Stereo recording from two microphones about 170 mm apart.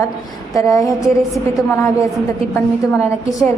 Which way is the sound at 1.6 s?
20° left (ahead or behind).